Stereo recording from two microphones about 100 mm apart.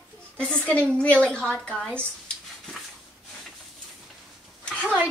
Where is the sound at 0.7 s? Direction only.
10° left (ahead or behind).